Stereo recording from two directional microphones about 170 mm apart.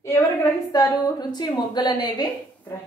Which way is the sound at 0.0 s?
15° left (ahead or behind).